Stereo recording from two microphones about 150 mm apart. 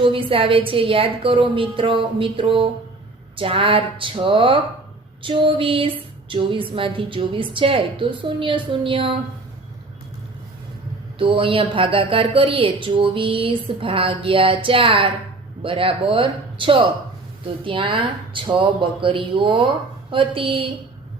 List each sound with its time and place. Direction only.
0.0 s a woman's voice: 35° right (ahead or behind)
11.2 s a woman's voice: 35° right (ahead or behind)